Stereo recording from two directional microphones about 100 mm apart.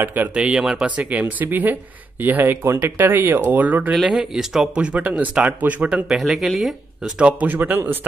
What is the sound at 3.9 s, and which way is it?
Speech, 5° right (ahead or behind).